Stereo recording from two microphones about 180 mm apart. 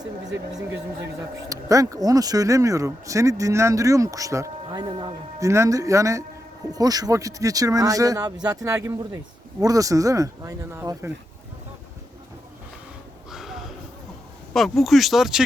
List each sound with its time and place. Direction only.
1.5 s speech: 20° right (ahead or behind)
13.3 s snort: centre (ahead or behind)
14.5 s speech: centre (ahead or behind)